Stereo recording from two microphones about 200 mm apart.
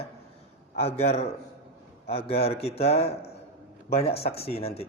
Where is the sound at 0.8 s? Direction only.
35° left (ahead or behind).